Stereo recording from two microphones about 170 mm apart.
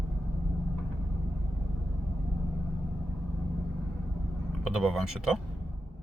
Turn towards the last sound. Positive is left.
turn(degrees=-5)  # may be behind; listen again after turning